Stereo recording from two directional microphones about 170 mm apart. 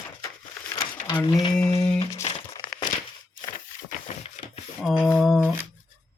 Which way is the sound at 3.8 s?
40° left (ahead or behind).